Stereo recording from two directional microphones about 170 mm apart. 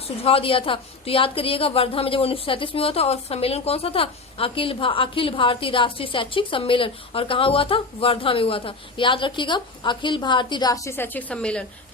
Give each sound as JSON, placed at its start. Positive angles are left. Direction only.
{"t": 0.3, "sound": "a woman's voice", "side_deg": 35}